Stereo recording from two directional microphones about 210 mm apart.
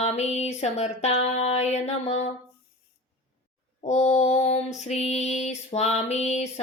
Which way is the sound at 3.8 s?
35° left (ahead or behind).